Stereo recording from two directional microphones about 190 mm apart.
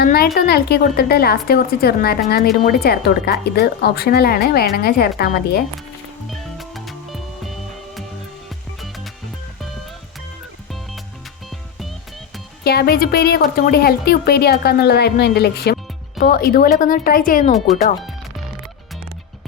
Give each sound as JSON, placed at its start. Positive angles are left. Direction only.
{"t": 0.0, "sound": "a woman's voice", "side_deg": 50}
{"t": 6.3, "sound": "music", "side_deg": 0}
{"t": 12.6, "sound": "a woman's voice", "side_deg": 55}